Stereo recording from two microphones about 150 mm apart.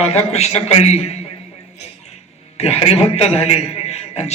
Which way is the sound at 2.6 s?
45° left (ahead or behind).